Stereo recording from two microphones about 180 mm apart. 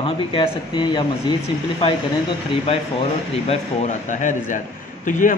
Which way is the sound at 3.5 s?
40° left (ahead or behind).